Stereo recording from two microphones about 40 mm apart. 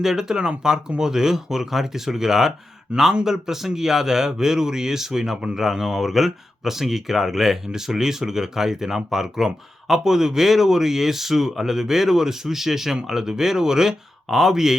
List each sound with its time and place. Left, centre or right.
0.0 s speech: centre
2.9 s speech: right
3.2 s speech: centre